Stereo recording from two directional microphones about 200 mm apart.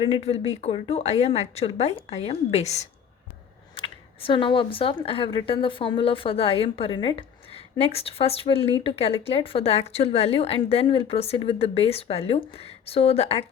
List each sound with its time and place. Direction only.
0.0 s a woman's voice: 30° left (ahead or behind)